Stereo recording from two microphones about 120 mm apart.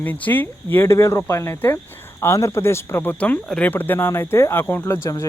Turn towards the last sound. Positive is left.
turn(degrees=30)  # may be behind; listen again after turning